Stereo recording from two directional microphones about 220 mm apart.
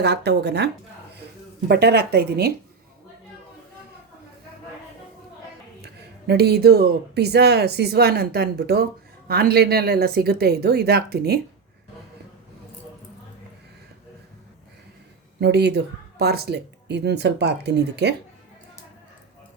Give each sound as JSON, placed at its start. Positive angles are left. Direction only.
{"t": 0.0, "sound": "speech", "side_deg": -50}
{"t": 5.8, "sound": "speech", "side_deg": -45}
{"t": 15.4, "sound": "speech", "side_deg": -50}